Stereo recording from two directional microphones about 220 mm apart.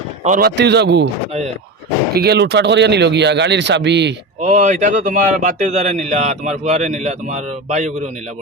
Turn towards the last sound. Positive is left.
turn(degrees=-30)  # may be behind; listen again after turning